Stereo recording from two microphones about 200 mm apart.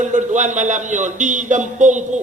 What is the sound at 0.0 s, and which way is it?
A man's voice, 40° right (ahead or behind).